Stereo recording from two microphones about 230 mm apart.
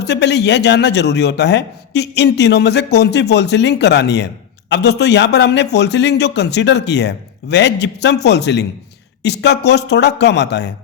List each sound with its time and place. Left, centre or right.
0.0 s a man's voice: left